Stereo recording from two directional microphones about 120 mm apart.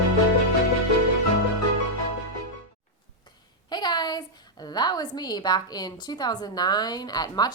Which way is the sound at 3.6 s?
35° left (ahead or behind).